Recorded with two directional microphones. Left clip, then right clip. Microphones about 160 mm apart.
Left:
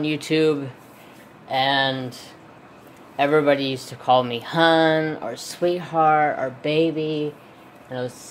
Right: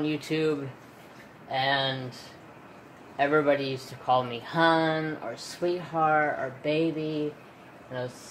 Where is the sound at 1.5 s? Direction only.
65° left (ahead or behind).